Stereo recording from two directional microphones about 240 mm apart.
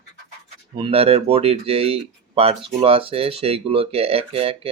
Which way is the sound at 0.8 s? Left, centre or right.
Right.